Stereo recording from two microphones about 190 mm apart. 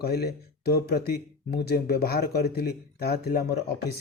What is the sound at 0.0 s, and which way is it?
Speech, 55° left (ahead or behind).